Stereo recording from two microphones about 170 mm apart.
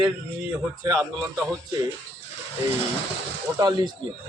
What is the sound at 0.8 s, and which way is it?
Speech, 20° right (ahead or behind).